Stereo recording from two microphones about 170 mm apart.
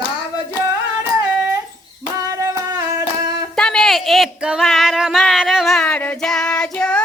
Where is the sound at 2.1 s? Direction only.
20° right (ahead or behind).